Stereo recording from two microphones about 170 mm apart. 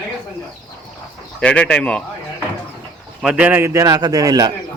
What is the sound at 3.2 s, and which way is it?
A man's voice, 5° right (ahead or behind).